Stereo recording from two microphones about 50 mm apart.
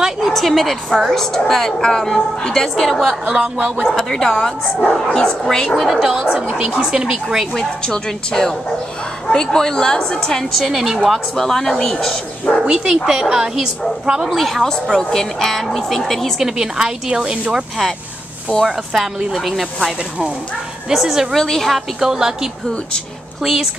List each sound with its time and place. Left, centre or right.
0.3 s a woman's voice: centre
3.3 s speech: centre
3.8 s a woman's voice: centre
5.8 s speech: centre
6.0 s a woman's voice: centre
7.8 s a woman's voice: centre
10.5 s a woman's voice: centre
12.6 s a woman's voice: centre
14.3 s speech: centre
16.3 s a woman's voice: centre
19.3 s speech: centre
20.9 s speech: centre
21.4 s speech: centre
22.0 s a woman's voice: centre